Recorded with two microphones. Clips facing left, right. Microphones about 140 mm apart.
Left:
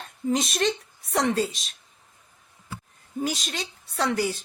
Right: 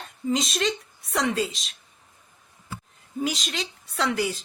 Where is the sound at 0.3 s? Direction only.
55° left (ahead or behind).